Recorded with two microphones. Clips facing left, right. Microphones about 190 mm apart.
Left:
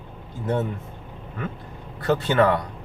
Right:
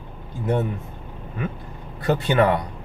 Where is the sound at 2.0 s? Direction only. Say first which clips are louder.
Even; 15° right (ahead or behind).